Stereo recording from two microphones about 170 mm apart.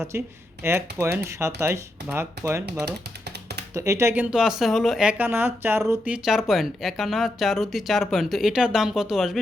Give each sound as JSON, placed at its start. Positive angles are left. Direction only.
{"t": 0.6, "sound": "speech", "side_deg": -15}
{"t": 3.8, "sound": "speech", "side_deg": -15}
{"t": 6.2, "sound": "speech", "side_deg": 0}